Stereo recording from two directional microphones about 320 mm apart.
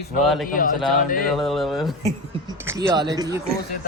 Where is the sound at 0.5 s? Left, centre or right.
Left.